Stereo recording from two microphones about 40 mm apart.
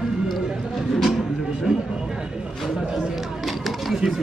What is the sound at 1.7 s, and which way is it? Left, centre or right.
Speech, centre.